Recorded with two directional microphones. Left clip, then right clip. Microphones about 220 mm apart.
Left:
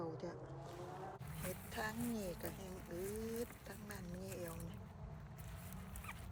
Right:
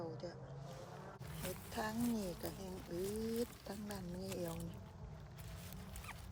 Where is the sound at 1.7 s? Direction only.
20° right (ahead or behind).